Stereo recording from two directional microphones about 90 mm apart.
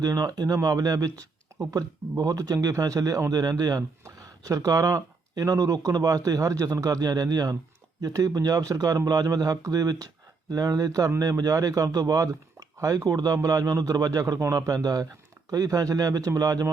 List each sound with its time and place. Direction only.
0.0 s a man's voice: 40° right (ahead or behind)